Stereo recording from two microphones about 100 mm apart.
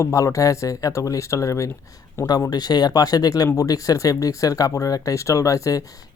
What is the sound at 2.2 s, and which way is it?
Speech, 40° left (ahead or behind).